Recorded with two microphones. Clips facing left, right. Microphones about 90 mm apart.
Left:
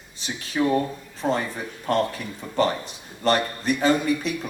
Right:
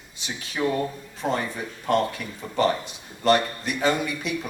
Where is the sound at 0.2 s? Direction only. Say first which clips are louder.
Left 4 dB; 35° left (ahead or behind).